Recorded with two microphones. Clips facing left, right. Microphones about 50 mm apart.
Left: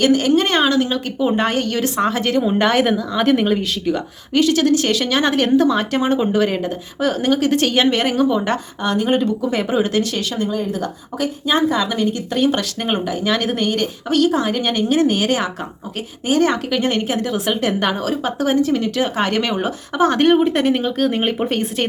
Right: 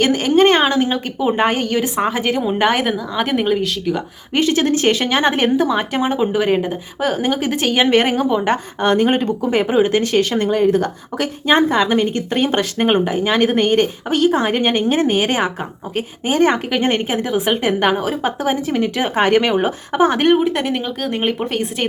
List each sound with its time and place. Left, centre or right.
0.0 s a woman's voice: right; by 4.0 s centre
4.3 s speech: right
5.5 s a woman's voice: centre
7.9 s speech: right
8.8 s speech: right
10.3 s speech: right
20.1 s speech: centre